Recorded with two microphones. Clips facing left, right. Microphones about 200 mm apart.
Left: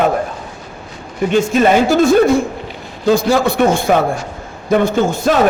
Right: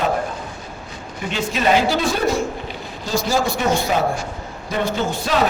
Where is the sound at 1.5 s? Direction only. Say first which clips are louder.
Left 3 dB; 50° left (ahead or behind).